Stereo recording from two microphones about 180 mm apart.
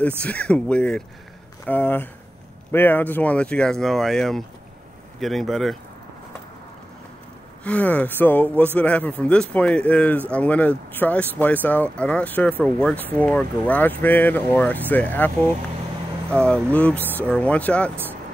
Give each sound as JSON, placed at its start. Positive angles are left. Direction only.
{"t": 0.2, "sound": "speech", "side_deg": 5}
{"t": 7.6, "sound": "speech", "side_deg": 5}
{"t": 16.3, "sound": "speech", "side_deg": -10}
{"t": 16.7, "sound": "speech", "side_deg": 10}